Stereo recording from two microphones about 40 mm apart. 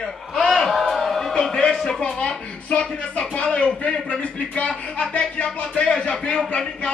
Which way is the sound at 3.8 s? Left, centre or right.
Left.